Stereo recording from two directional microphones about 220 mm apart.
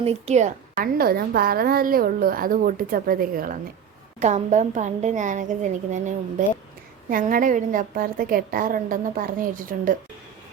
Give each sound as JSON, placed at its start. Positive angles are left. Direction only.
{"t": 0.0, "sound": "a woman's voice", "side_deg": -30}